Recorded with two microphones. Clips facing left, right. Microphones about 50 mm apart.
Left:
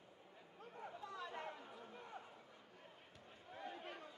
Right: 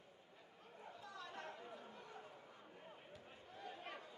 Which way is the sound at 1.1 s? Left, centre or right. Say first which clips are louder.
Left 3 dB; centre.